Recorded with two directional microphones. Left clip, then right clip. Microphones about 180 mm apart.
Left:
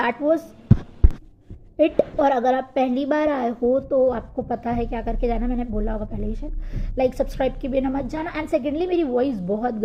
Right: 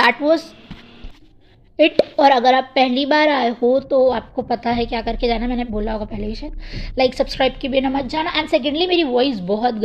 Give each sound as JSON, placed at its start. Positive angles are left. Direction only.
{"t": 0.0, "sound": "a woman's voice", "side_deg": -30}
{"t": 1.7, "sound": "a woman's voice", "side_deg": -30}